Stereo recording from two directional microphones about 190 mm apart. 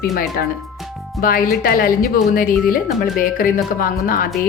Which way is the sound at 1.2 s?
50° left (ahead or behind).